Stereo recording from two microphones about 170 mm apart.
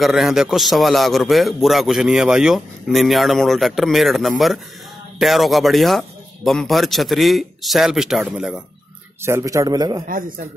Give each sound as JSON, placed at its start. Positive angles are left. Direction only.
{"t": 0.0, "sound": "a man's voice", "side_deg": 0}
{"t": 9.2, "sound": "a man's voice", "side_deg": -15}
{"t": 10.0, "sound": "a man's voice", "side_deg": -55}